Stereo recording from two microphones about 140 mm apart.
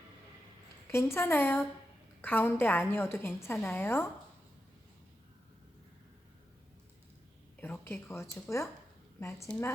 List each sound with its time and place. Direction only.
0.9 s a woman's voice: 15° left (ahead or behind)
7.6 s a woman's voice: 15° left (ahead or behind)